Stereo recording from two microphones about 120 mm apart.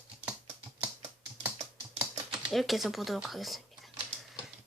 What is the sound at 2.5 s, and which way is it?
Speech, centre (ahead or behind).